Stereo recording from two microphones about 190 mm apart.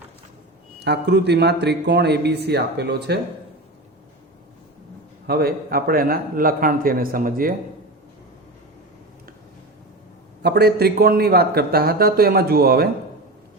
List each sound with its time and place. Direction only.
0.8 s a man's voice: 60° right (ahead or behind)
5.2 s a man's voice: 55° right (ahead or behind)
10.4 s a man's voice: 60° right (ahead or behind)